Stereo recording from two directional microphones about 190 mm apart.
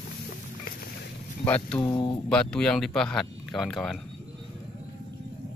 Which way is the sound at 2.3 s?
5° left (ahead or behind).